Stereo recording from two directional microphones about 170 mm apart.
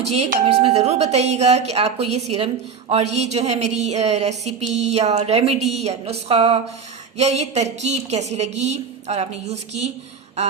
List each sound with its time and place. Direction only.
0.1 s a woman's voice: 40° right (ahead or behind)